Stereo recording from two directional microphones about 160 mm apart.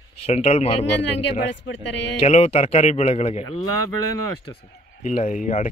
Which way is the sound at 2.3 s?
40° left (ahead or behind).